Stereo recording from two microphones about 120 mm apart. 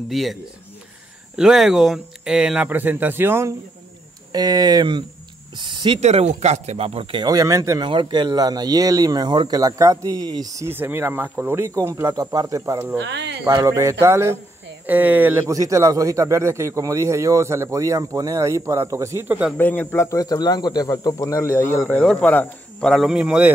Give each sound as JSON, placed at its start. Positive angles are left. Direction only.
{"t": 0.1, "sound": "speech", "side_deg": 0}
{"t": 4.3, "sound": "speech", "side_deg": -35}
{"t": 5.9, "sound": "speech", "side_deg": -70}
{"t": 7.2, "sound": "speech", "side_deg": -30}
{"t": 7.9, "sound": "speech", "side_deg": -40}
{"t": 19.5, "sound": "a man's voice", "side_deg": 15}
{"t": 21.9, "sound": "speech", "side_deg": 10}
{"t": 23.0, "sound": "speech", "side_deg": -10}